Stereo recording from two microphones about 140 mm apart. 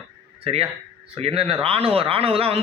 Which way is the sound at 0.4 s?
40° right (ahead or behind).